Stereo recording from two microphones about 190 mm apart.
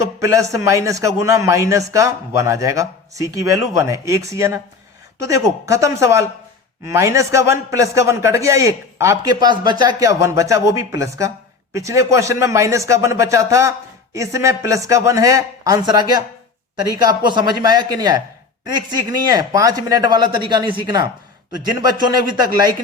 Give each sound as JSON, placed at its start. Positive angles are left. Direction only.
{"t": 0.2, "sound": "a man's voice", "side_deg": -15}